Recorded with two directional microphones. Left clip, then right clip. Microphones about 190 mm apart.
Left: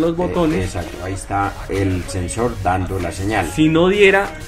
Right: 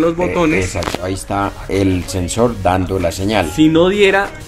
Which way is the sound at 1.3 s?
70° right (ahead or behind).